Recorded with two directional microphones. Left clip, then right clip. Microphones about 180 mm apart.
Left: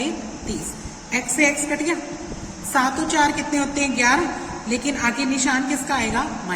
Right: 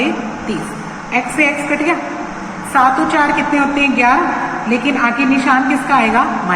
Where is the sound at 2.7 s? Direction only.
60° left (ahead or behind).